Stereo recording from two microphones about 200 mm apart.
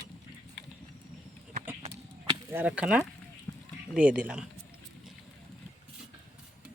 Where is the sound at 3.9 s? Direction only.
5° right (ahead or behind).